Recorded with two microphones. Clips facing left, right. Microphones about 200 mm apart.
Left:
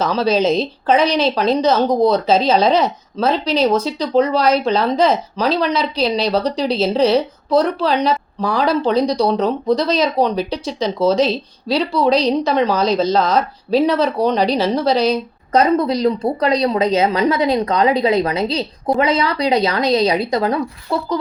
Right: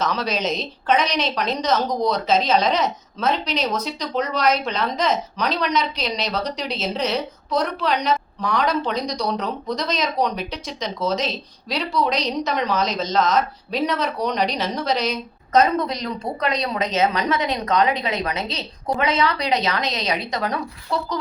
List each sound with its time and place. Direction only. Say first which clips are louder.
0.0 s speech: left 8 dB; 30° left (ahead or behind)